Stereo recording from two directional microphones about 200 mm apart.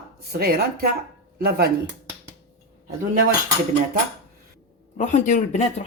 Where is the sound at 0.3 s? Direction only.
50° right (ahead or behind).